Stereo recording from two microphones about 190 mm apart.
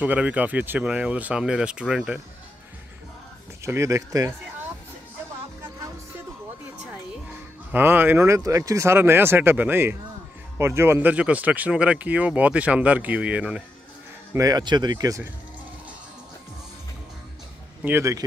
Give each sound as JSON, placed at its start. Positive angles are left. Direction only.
{"t": 0.0, "sound": "speech", "side_deg": -10}
{"t": 3.6, "sound": "speech", "side_deg": -15}
{"t": 7.7, "sound": "speech", "side_deg": -10}
{"t": 14.3, "sound": "speech", "side_deg": -20}
{"t": 17.8, "sound": "speech", "side_deg": -15}